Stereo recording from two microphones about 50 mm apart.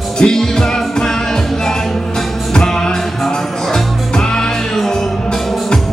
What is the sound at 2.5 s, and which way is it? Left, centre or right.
Music, centre.